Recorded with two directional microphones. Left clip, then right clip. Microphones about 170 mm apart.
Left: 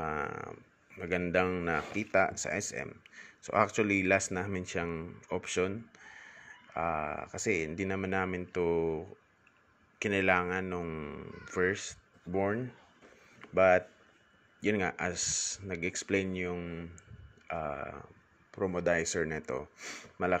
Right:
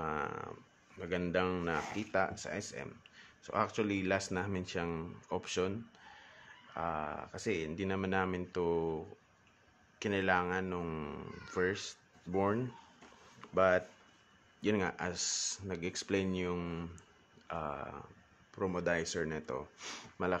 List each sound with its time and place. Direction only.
0.0 s a sound: 15° left (ahead or behind)
1.5 s speech: 15° left (ahead or behind)
4.8 s speech: centre (ahead or behind)
5.3 s speech: 15° left (ahead or behind)
10.8 s speech: centre (ahead or behind)
11.4 s speech: 15° left (ahead or behind)
12.3 s speech: centre (ahead or behind)
13.4 s speech: 15° left (ahead or behind)
16.5 s speech: 10° right (ahead or behind)
17.5 s speech: 5° left (ahead or behind)